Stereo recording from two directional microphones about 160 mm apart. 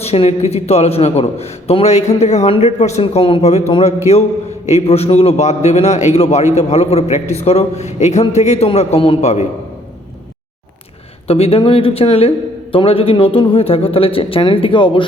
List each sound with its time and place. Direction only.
0.0 s a man's voice: 40° left (ahead or behind)
11.3 s a man's voice: 40° left (ahead or behind)